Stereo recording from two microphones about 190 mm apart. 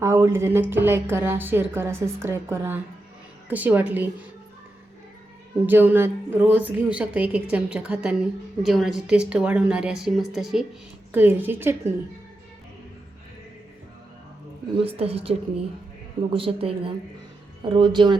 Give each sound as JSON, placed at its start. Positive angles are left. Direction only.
{"t": 0.0, "sound": "a sound", "side_deg": -15}
{"t": 0.7, "sound": "a woman's voice", "side_deg": -10}
{"t": 5.6, "sound": "a woman's voice", "side_deg": -10}
{"t": 14.8, "sound": "a woman's voice", "side_deg": -30}